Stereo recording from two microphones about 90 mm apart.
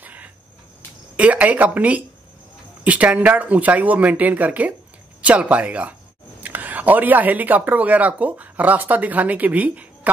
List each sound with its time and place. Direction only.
0.0 s cricket: 15° right (ahead or behind)
1.1 s speech: 15° right (ahead or behind)